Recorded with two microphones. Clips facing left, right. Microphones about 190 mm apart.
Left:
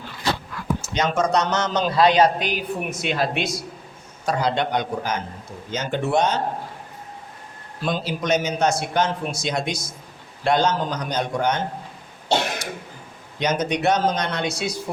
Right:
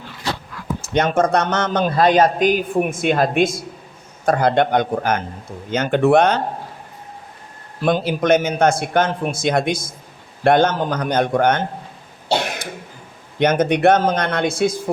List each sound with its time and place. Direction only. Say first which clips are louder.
0.9 s a man's voice: right 5 dB; 55° right (ahead or behind)
7.8 s a man's voice: right 7 dB; 60° right (ahead or behind)
13.4 s a man's voice: right 7 dB; 55° right (ahead or behind)